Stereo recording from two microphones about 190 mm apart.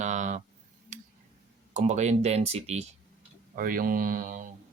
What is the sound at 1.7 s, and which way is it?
Speech, 40° right (ahead or behind).